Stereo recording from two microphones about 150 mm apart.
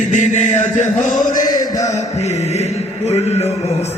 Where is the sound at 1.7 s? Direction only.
20° left (ahead or behind).